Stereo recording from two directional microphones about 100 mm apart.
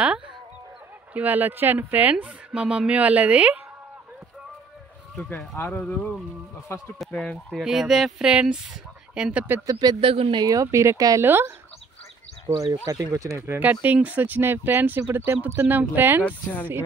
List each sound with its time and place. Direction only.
1.1 s speech: 15° right (ahead or behind)
5.6 s speech: 15° left (ahead or behind)
6.7 s speech: 25° left (ahead or behind)
7.1 s speech: 10° left (ahead or behind)
7.6 s speech: 5° right (ahead or behind)
9.7 s speech: 45° right (ahead or behind)
9.9 s speech: 70° right (ahead or behind)
10.3 s speech: 35° right (ahead or behind)
11.2 s speech: 20° right (ahead or behind)
12.8 s speech: 40° right (ahead or behind)
13.5 s speech: 15° right (ahead or behind)